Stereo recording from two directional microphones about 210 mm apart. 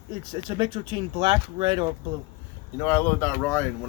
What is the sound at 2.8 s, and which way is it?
Speech, 10° left (ahead or behind).